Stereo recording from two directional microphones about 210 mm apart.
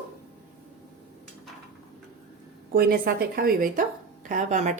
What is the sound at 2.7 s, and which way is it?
A woman's voice, 45° right (ahead or behind).